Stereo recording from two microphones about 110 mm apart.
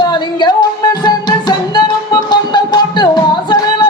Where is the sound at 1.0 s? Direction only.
40° left (ahead or behind).